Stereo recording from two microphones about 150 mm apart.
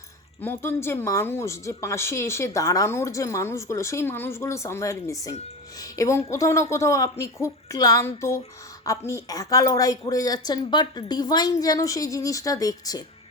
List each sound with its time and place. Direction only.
0.4 s a woman's voice: 15° left (ahead or behind)